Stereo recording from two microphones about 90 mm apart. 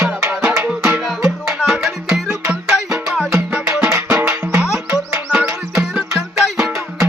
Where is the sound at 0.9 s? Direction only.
5° right (ahead or behind).